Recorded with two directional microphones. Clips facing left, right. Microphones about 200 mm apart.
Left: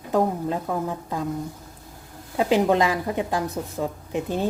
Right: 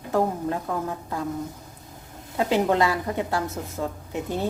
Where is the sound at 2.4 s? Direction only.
15° left (ahead or behind).